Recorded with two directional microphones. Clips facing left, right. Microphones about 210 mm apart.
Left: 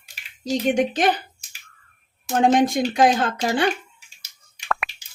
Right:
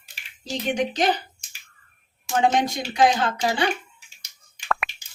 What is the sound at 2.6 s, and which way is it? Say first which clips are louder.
Speech: left 3 dB; 50° left (ahead or behind).